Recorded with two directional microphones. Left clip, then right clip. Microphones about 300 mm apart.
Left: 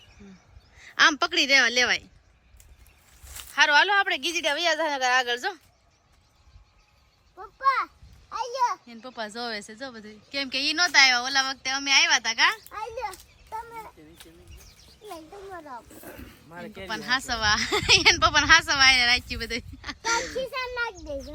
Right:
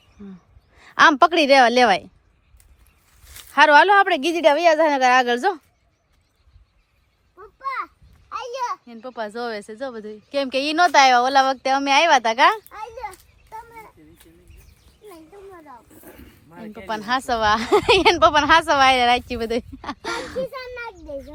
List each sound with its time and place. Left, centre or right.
0.8 s speech: centre
3.5 s speech: centre
7.6 s a sound: centre
8.3 s a sound: right
8.9 s speech: centre
12.6 s a sound: centre
15.0 s speech: centre
16.9 s speech: centre
20.5 s a child's voice: centre